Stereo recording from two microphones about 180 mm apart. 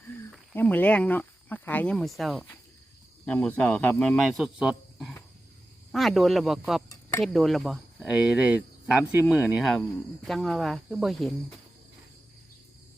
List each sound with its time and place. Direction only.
0.3 s speech: 10° left (ahead or behind)